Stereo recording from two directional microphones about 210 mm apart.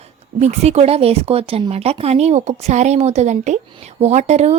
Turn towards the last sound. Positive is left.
turn(degrees=-30)  # may be behind; listen again after turning